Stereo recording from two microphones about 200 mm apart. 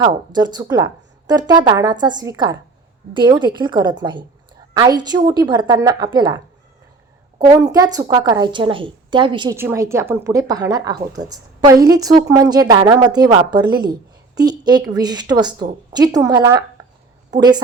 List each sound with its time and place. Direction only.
0.3 s a woman's voice: 20° right (ahead or behind)